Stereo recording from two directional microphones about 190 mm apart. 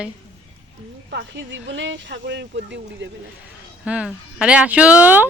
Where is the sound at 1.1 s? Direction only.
65° right (ahead or behind).